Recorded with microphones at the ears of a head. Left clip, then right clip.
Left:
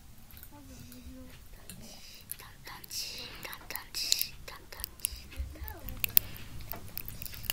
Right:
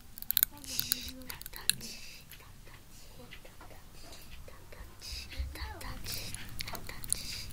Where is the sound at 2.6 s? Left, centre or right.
Left.